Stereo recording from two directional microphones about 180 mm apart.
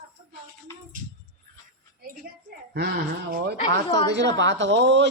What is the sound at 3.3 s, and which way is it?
Speech, 65° right (ahead or behind).